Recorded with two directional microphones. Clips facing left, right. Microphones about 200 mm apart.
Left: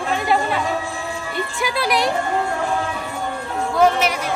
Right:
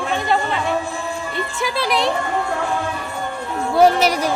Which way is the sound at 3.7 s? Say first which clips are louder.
Right 3 dB; 35° right (ahead or behind).